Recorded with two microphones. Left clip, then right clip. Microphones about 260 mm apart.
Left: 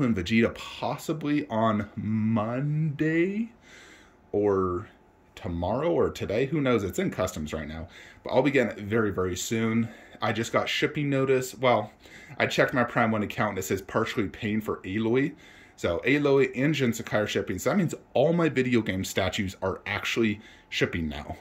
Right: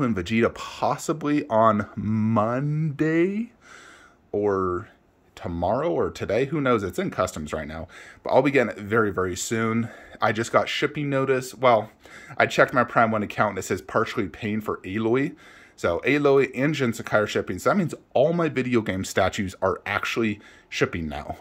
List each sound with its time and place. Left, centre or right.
0.0 s speech: centre